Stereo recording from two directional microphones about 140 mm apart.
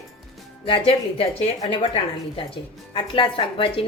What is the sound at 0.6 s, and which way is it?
Speech, 40° left (ahead or behind).